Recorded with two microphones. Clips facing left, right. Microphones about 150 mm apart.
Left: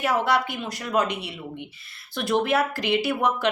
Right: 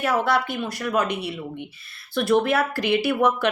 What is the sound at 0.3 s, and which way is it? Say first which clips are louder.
A woman's voice: right 1 dB; 20° left (ahead or behind).